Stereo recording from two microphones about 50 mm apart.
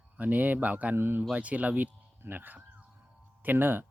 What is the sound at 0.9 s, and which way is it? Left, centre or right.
Speech, right.